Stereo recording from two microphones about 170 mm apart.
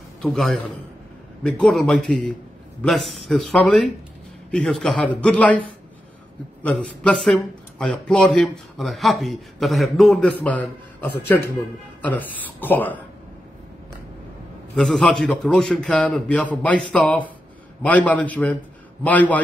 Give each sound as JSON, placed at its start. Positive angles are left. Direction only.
{"t": 0.2, "sound": "speech", "side_deg": 5}
{"t": 6.6, "sound": "speech", "side_deg": 5}
{"t": 14.8, "sound": "speech", "side_deg": 0}